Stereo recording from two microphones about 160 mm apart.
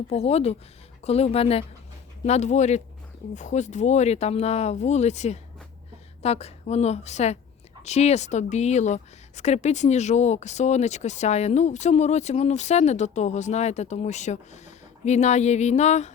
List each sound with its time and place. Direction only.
0.1 s speech: 40° left (ahead or behind)